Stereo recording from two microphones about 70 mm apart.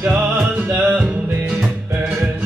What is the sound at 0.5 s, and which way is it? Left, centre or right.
Music, right.